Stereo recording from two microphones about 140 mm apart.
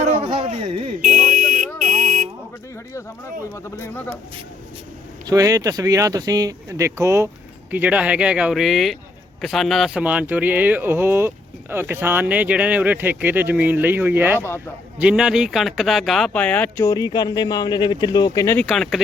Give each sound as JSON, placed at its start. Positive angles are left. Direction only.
{"t": 0.2, "sound": "a sound", "side_deg": -40}
{"t": 1.0, "sound": "buzzer", "side_deg": -70}
{"t": 3.5, "sound": "speech", "side_deg": 15}
{"t": 5.2, "sound": "speech", "side_deg": -25}
{"t": 18.5, "sound": "speech", "side_deg": 5}